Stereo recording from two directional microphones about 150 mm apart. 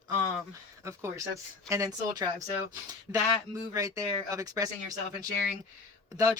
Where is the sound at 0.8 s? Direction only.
20° right (ahead or behind).